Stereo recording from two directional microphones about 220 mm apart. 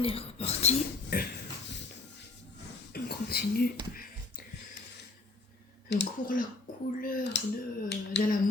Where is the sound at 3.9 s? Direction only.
40° left (ahead or behind).